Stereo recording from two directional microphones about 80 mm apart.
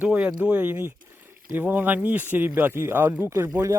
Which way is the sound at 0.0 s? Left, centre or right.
Centre.